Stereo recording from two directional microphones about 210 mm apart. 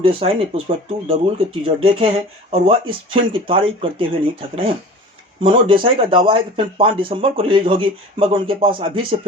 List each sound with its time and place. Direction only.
0.0 s speech: 25° right (ahead or behind)